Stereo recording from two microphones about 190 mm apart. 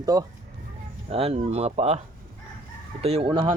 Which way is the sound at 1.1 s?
30° right (ahead or behind).